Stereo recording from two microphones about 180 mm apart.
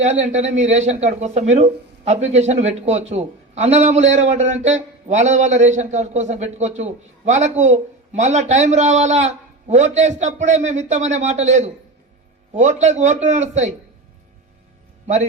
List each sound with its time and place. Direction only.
0.2 s speech: 40° right (ahead or behind)